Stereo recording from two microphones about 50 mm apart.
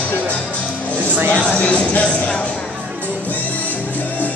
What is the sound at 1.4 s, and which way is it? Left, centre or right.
Music, left.